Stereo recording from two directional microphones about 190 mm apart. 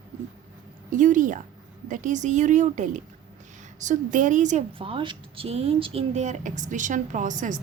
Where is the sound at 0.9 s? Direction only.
40° right (ahead or behind).